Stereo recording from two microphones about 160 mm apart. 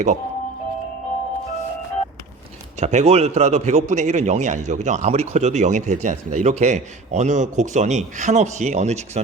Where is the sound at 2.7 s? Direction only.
45° right (ahead or behind).